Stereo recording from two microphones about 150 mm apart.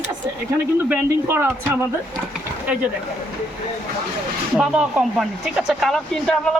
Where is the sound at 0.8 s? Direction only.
10° right (ahead or behind).